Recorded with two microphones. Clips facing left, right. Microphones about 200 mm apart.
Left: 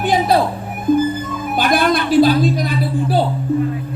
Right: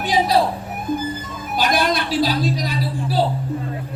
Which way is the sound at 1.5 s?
55° left (ahead or behind).